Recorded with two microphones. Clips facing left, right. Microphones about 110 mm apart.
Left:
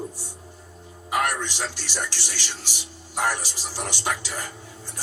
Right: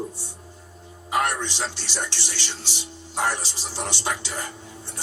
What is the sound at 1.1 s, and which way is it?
A man's voice, 20° right (ahead or behind).